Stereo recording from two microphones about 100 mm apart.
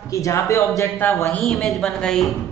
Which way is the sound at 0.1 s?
30° left (ahead or behind).